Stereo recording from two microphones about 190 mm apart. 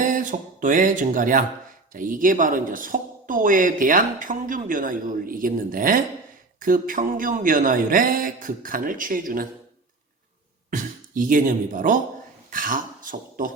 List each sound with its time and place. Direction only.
0.0 s a sound: 45° right (ahead or behind)
1.9 s speech: 45° right (ahead or behind)
10.7 s speech: 45° right (ahead or behind)